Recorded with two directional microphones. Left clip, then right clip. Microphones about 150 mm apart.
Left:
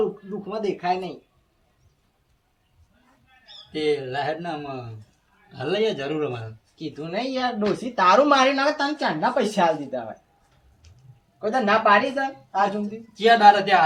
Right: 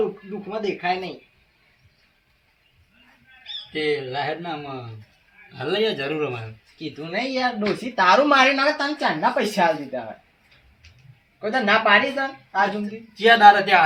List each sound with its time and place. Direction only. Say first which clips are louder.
0.0 s speech: even; 5° left (ahead or behind)
3.7 s speech: even; 10° left (ahead or behind)
11.3 s a man's voice: right 1 dB; 5° left (ahead or behind)